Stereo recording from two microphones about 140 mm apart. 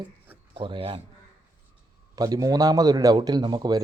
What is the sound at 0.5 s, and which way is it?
Speech, 40° right (ahead or behind).